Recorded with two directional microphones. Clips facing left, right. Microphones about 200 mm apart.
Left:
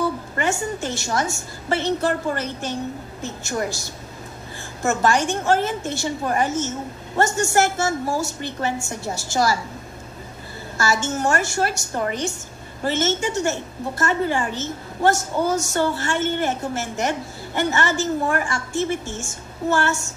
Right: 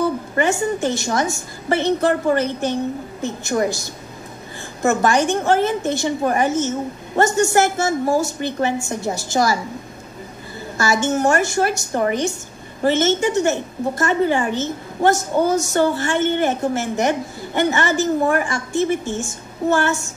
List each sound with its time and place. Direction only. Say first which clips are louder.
0.8 s a woman's voice: right 4 dB; 15° right (ahead or behind)
10.8 s a woman's voice: right 4 dB; 15° right (ahead or behind)